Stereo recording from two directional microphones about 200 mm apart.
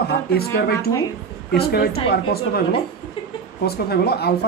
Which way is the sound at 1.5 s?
50° left (ahead or behind).